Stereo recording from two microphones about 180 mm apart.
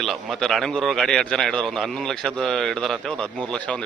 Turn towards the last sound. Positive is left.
turn(degrees=5)  # may be behind; listen again after turning